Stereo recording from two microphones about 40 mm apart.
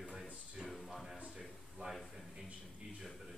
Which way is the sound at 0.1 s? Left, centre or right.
Centre.